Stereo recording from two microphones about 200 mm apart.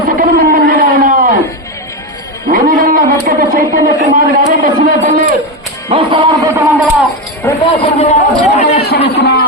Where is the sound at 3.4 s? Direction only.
45° right (ahead or behind).